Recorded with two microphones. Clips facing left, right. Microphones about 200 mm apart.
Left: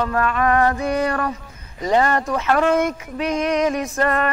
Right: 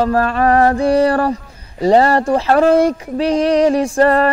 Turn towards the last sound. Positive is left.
turn(degrees=-30)  # may be behind; listen again after turning